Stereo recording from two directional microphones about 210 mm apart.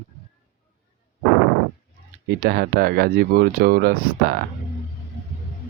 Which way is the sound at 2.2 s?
50° right (ahead or behind).